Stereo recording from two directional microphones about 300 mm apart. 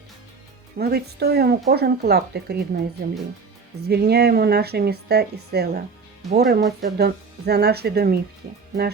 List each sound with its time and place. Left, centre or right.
0.8 s speech: right
3.8 s speech: right